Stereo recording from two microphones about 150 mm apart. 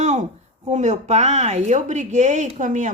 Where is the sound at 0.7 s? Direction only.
50° right (ahead or behind).